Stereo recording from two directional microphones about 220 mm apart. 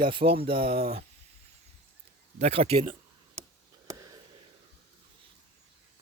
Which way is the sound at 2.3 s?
30° right (ahead or behind).